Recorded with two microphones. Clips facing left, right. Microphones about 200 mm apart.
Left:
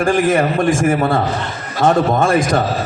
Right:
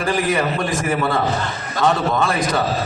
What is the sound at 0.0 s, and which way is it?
A man's voice, 50° left (ahead or behind).